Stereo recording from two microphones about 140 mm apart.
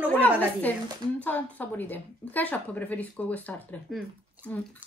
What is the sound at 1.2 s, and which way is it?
A woman's voice, 10° left (ahead or behind).